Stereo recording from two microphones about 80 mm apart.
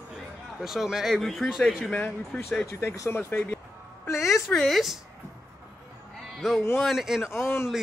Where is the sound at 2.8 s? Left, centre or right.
Left.